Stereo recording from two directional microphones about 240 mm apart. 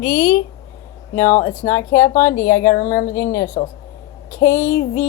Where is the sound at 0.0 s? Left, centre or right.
Centre.